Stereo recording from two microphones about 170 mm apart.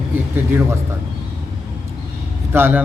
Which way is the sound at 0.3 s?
10° right (ahead or behind).